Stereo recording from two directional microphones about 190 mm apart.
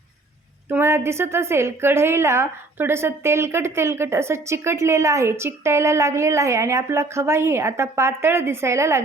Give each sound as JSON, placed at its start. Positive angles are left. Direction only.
{"t": 0.7, "sound": "a woman's voice", "side_deg": -15}